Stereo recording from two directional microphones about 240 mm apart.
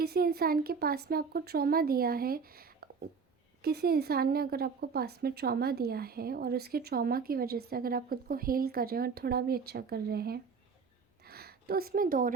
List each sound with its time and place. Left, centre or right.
0.0 s speech: right